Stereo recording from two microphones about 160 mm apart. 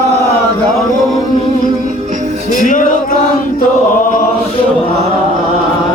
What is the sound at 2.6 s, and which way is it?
Male singing, 55° left (ahead or behind).